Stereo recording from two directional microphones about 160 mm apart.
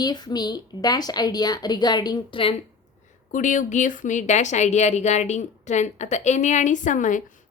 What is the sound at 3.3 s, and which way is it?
A woman's voice, 50° left (ahead or behind).